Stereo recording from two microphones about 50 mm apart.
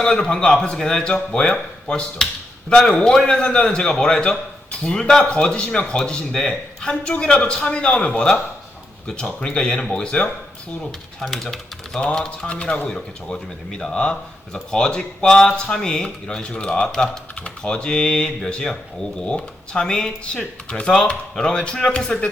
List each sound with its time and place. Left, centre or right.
0.0 s a man's voice: centre
11.2 s speech: centre
11.9 s speech: centre